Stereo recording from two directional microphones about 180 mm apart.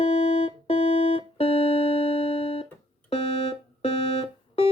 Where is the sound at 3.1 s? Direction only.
30° left (ahead or behind).